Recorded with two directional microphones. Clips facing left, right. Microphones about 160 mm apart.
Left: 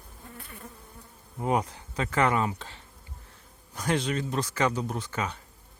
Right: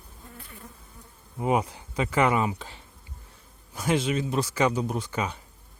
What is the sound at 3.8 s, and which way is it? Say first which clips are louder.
Speech: right 3 dB; 10° right (ahead or behind).